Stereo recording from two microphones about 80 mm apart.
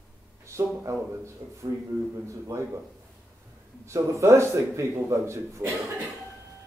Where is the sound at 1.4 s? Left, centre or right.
Right.